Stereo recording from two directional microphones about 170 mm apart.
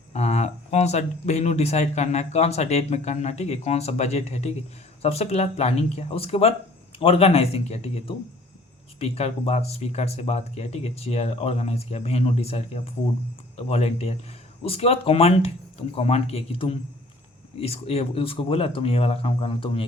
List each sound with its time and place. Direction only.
0.1 s speech: 40° left (ahead or behind)